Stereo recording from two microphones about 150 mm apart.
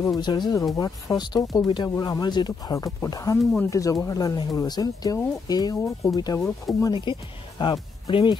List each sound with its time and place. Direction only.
0.2 s speech: 30° left (ahead or behind)